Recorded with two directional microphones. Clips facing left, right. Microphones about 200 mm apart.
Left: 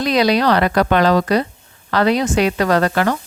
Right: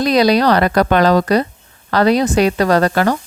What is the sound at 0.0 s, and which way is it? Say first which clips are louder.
A woman's voice: right 3 dB; 40° right (ahead or behind).